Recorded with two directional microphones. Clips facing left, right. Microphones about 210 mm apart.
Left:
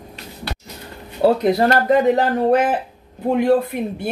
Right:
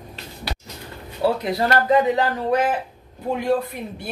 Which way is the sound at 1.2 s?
50° left (ahead or behind).